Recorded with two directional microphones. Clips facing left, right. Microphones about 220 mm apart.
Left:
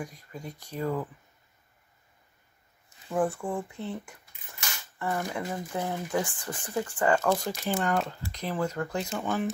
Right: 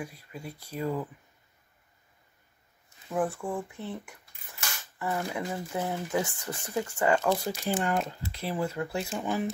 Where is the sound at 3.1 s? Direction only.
Centre (ahead or behind).